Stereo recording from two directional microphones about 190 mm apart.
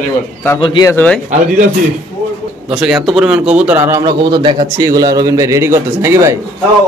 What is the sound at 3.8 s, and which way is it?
A man's voice, 20° right (ahead or behind).